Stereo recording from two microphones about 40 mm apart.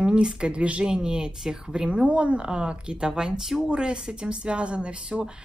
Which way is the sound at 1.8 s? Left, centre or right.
Right.